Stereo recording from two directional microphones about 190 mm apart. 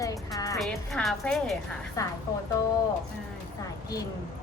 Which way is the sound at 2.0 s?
15° left (ahead or behind).